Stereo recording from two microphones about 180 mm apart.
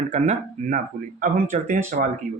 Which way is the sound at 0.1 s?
45° right (ahead or behind).